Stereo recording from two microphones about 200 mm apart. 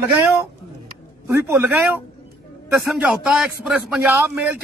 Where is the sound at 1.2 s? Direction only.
10° right (ahead or behind).